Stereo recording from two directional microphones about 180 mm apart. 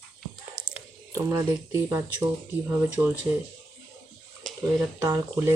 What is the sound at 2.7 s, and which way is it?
Speech, 10° right (ahead or behind).